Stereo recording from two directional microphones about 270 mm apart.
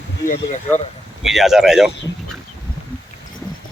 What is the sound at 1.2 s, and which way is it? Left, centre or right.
Speech, centre.